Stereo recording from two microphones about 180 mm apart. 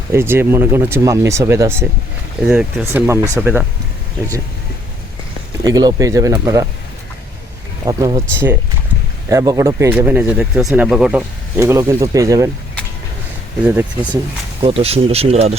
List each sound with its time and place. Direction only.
0.1 s speech: 15° right (ahead or behind)
5.6 s speech: 20° right (ahead or behind)
7.9 s speech: 20° right (ahead or behind)
13.7 s speech: 10° right (ahead or behind)
14.6 s speech: 30° right (ahead or behind)